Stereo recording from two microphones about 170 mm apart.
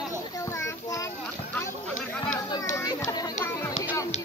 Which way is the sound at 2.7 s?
20° left (ahead or behind).